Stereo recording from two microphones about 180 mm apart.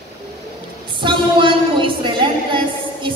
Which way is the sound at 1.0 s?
25° right (ahead or behind).